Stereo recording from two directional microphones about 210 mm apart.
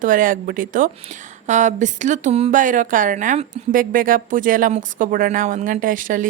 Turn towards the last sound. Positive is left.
turn(degrees=-40)  # may be behind; listen again after turning